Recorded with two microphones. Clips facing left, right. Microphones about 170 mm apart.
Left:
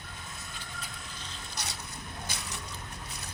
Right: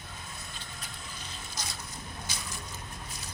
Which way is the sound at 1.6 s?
65° left (ahead or behind).